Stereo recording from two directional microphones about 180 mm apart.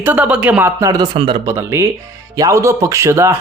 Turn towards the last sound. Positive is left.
turn(degrees=-15)  # may be behind; listen again after turning